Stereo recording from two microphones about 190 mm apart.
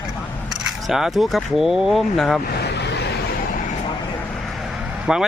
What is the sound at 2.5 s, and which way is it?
Vehicle, 60° left (ahead or behind).